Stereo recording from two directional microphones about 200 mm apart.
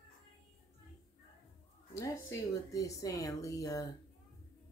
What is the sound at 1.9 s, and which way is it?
Speech, 15° left (ahead or behind).